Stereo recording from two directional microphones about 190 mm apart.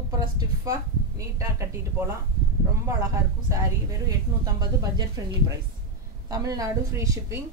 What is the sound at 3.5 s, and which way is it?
A woman's voice, 20° right (ahead or behind).